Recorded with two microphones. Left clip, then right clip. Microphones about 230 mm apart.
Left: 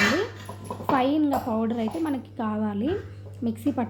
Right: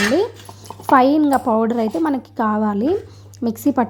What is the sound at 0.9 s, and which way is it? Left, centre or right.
A woman's voice, right.